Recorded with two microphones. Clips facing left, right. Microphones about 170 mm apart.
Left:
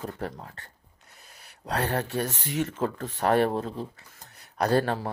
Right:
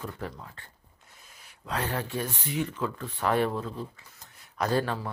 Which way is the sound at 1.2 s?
40° left (ahead or behind).